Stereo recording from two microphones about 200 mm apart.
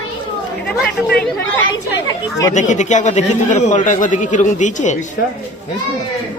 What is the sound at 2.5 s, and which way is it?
A man's voice, 35° left (ahead or behind).